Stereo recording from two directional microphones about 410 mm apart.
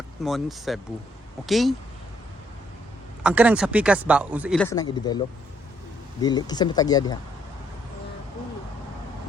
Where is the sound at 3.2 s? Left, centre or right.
Centre.